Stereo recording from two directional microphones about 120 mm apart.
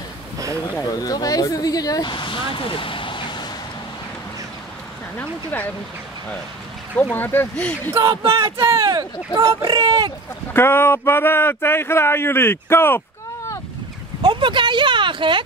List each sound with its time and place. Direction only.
0.9 s speech: 30° left (ahead or behind)
7.0 s speech: 15° left (ahead or behind)
7.9 s speech: 30° right (ahead or behind)
10.5 s speech: 20° left (ahead or behind)
14.2 s a sound: 40° right (ahead or behind)